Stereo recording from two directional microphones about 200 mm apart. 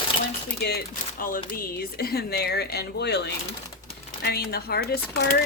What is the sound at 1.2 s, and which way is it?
Speech, 45° left (ahead or behind).